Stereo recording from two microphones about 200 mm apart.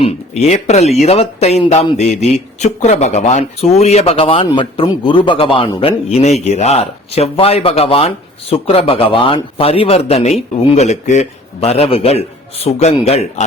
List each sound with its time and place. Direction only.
0.0 s speech: 30° left (ahead or behind)